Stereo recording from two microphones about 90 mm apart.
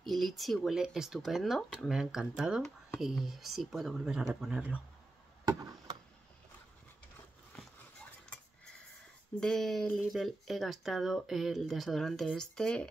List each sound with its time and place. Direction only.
0.0 s speech: centre (ahead or behind)
5.6 s a sound: 45° right (ahead or behind)
9.4 s speech: 5° left (ahead or behind)